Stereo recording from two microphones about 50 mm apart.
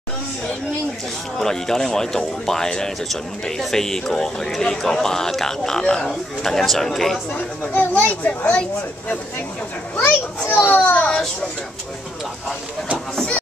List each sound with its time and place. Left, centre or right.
1.4 s speech: centre
7.6 s a child's voice: left
10.0 s a child's voice: left
10.8 s a child's voice: left
13.1 s a sound: centre